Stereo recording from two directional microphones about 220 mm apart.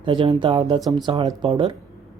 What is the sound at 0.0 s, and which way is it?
Speech, 20° right (ahead or behind).